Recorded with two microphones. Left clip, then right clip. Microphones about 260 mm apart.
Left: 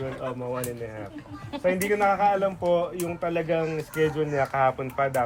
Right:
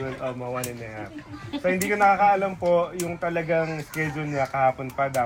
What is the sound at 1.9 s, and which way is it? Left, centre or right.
Speech, centre.